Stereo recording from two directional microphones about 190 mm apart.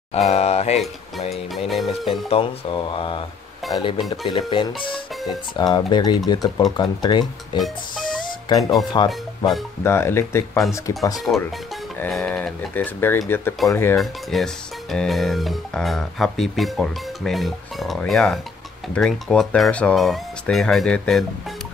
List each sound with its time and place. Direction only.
0.1 s speech: 35° left (ahead or behind)
1.7 s music: centre (ahead or behind)
2.2 s speech: 30° left (ahead or behind)
7.5 s speech: centre (ahead or behind)
8.5 s speech: 20° left (ahead or behind)
9.8 s speech: 15° left (ahead or behind)
13.9 s speech: centre (ahead or behind)